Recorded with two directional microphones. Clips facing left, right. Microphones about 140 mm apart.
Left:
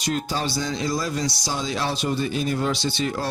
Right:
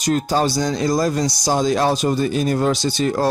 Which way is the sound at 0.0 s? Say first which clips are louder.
Right 7 dB; 45° right (ahead or behind).